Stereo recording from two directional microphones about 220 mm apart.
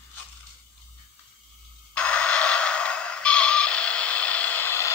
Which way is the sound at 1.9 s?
5° left (ahead or behind).